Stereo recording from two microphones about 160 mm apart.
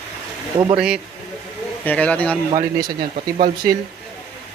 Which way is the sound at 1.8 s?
10° left (ahead or behind).